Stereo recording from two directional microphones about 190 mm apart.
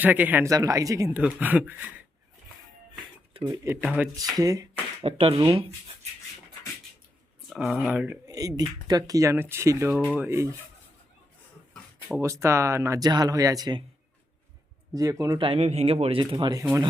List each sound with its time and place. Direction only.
0.0 s speech: 10° right (ahead or behind)
3.3 s speech: 20° right (ahead or behind)
5.0 s speech: 30° right (ahead or behind)
7.5 s speech: centre (ahead or behind)
8.3 s speech: 20° right (ahead or behind)
11.7 s a sound: 5° right (ahead or behind)
12.2 s speech: 15° right (ahead or behind)
14.9 s speech: 20° right (ahead or behind)